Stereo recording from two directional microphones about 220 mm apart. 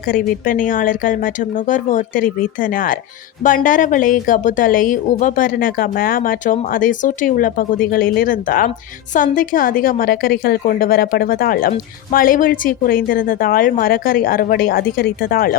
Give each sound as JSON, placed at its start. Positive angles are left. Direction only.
{"t": 0.0, "sound": "speech", "side_deg": 40}